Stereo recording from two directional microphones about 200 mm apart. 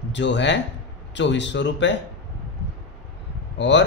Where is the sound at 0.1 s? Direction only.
65° left (ahead or behind).